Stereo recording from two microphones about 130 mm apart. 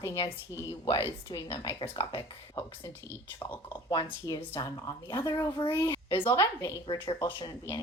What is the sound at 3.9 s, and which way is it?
Speech, 40° left (ahead or behind).